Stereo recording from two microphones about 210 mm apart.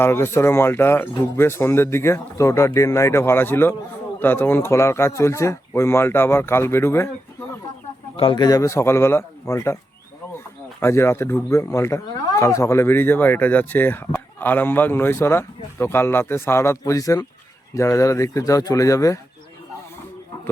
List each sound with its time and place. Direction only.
0.0 s speech: 10° left (ahead or behind)
8.1 s speech: 25° left (ahead or behind)
10.8 s speech: 10° left (ahead or behind)